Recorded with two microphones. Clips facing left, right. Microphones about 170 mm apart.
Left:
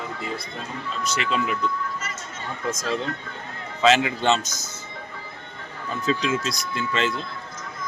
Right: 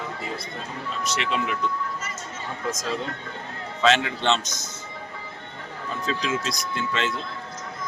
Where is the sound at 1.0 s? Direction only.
Centre (ahead or behind).